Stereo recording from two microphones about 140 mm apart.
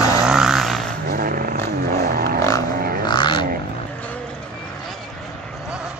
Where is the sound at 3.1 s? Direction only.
35° left (ahead or behind).